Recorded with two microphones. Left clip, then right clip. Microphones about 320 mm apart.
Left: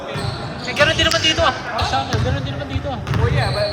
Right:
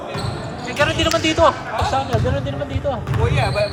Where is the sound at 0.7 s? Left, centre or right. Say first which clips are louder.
Left 2 dB; centre.